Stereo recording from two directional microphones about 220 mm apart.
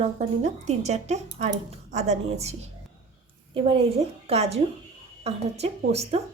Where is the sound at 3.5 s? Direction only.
25° right (ahead or behind).